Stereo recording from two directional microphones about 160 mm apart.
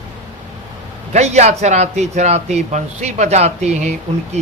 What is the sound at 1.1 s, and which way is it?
Speech, 45° right (ahead or behind).